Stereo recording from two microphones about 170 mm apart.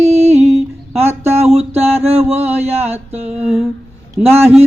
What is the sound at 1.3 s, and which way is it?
Mantra, 35° right (ahead or behind).